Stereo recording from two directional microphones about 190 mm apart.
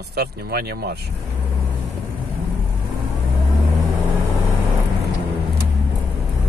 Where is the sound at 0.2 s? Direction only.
55° right (ahead or behind).